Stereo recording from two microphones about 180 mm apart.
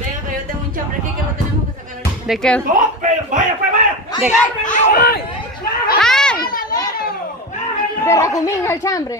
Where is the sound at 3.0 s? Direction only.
45° right (ahead or behind).